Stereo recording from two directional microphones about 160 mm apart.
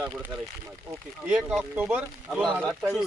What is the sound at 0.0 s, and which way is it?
Speech, 10° right (ahead or behind).